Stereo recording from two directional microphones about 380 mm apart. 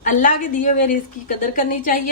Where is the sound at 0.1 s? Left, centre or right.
Left.